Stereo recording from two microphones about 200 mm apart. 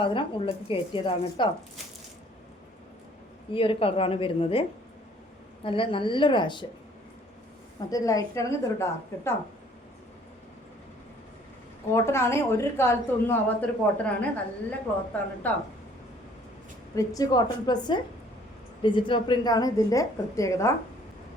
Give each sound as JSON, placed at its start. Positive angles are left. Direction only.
{"t": 0.0, "sound": "speech", "side_deg": 25}
{"t": 3.5, "sound": "speech", "side_deg": 25}
{"t": 5.6, "sound": "speech", "side_deg": 25}
{"t": 7.9, "sound": "a woman's voice", "side_deg": 15}
{"t": 11.9, "sound": "a woman's voice", "side_deg": 15}
{"t": 16.9, "sound": "a woman's voice", "side_deg": 15}